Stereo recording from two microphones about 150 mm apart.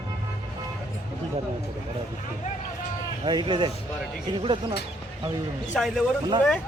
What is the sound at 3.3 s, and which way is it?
Speech, 30° right (ahead or behind).